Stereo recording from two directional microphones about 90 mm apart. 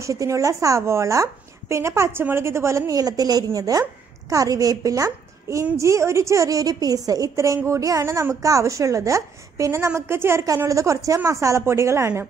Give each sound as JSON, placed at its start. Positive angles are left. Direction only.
{"t": 0.0, "sound": "a woman's voice", "side_deg": -35}